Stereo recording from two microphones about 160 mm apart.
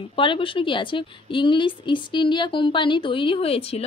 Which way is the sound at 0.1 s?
30° left (ahead or behind).